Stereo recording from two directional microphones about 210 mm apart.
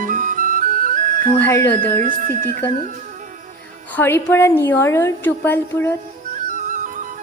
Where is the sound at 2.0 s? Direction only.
40° right (ahead or behind).